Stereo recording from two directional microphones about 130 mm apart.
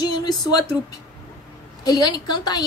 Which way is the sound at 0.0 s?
30° left (ahead or behind).